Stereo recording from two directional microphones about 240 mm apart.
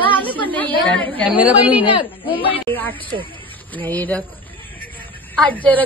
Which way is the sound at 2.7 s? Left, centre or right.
Centre.